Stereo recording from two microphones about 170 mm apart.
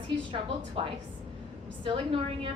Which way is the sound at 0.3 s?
30° right (ahead or behind).